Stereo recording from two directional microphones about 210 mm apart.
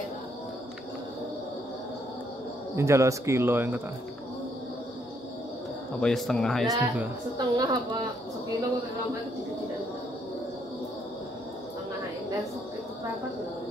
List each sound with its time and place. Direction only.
2.7 s a man's voice: 15° right (ahead or behind)
5.9 s speech: centre (ahead or behind)
6.7 s a woman's voice: 15° right (ahead or behind)